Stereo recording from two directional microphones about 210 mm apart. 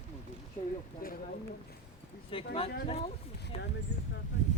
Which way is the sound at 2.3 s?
25° left (ahead or behind).